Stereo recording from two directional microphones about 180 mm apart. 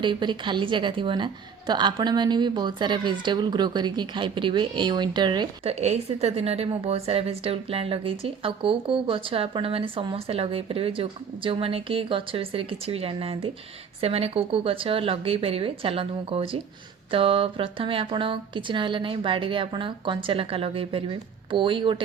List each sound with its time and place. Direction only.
0.0 s a woman's voice: 25° right (ahead or behind)
5.8 s a woman's voice: 35° right (ahead or behind)